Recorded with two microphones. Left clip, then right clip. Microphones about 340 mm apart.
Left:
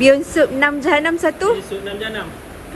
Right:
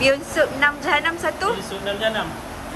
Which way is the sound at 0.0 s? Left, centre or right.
Centre.